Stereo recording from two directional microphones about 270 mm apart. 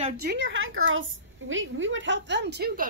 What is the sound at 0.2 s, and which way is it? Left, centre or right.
A woman's voice, right.